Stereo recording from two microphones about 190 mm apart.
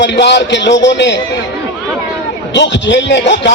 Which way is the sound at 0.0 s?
65° left (ahead or behind).